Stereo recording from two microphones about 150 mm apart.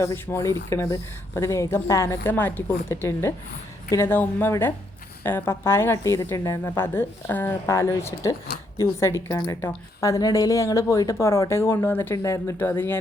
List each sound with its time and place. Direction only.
0.0 s speech: 15° left (ahead or behind)